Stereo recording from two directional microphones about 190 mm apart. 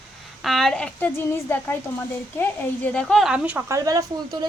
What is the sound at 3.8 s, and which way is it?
Speech, 20° right (ahead or behind).